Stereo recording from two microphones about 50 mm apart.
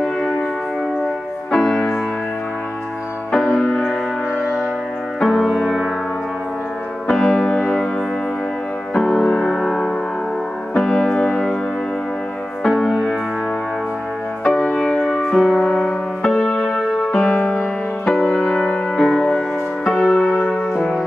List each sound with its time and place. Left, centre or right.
1.5 s music: centre
3.3 s music: centre
5.2 s music: centre
7.1 s music: centre
9.0 s music: centre
12.6 s music: centre
14.4 s music: centre
15.3 s music: centre
15.6 s music: centre
16.6 s music: centre
17.3 s music: centre
19.8 s music: centre